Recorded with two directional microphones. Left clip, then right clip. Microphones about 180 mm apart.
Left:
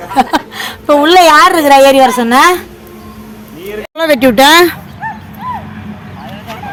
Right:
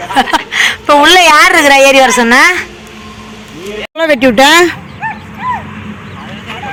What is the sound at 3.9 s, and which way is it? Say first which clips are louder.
Speech: even; 5° right (ahead or behind).